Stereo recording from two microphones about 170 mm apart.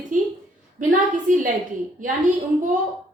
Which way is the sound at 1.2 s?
50° right (ahead or behind).